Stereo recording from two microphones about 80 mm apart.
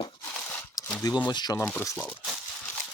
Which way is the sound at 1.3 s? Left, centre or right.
Left.